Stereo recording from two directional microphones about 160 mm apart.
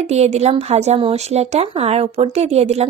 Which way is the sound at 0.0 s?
45° right (ahead or behind).